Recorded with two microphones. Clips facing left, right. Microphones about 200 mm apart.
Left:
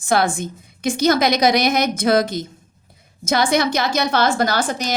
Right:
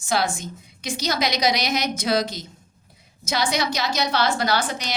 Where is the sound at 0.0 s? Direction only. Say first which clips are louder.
Left 5 dB; 55° left (ahead or behind).